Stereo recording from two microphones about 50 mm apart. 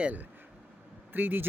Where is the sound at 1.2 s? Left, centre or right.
Right.